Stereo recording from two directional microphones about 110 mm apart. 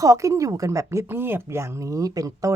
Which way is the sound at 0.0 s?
30° right (ahead or behind).